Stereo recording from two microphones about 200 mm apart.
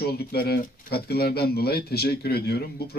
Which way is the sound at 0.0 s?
50° left (ahead or behind).